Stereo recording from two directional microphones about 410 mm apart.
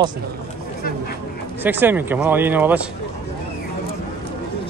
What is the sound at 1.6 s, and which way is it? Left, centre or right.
Speech, centre.